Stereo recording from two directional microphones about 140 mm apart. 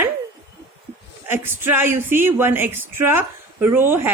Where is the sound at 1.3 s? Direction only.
15° right (ahead or behind).